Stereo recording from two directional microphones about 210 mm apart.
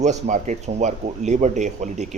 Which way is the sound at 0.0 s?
35° right (ahead or behind).